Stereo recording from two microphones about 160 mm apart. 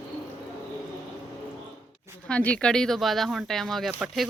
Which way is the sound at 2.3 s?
5° left (ahead or behind).